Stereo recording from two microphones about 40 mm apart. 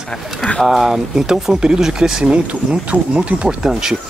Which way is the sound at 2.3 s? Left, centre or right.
Right.